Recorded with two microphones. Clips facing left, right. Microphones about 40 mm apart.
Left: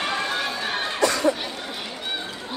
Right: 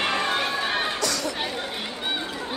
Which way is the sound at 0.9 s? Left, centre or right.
Left.